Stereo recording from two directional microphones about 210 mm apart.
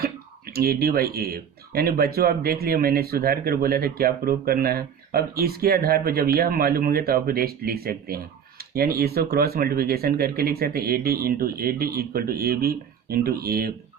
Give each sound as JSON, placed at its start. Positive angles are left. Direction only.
{"t": 0.0, "sound": "speech", "side_deg": -45}